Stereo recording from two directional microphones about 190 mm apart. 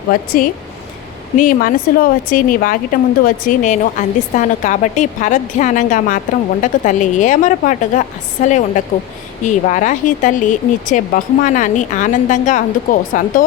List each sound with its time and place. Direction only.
0.1 s a woman's voice: 50° left (ahead or behind)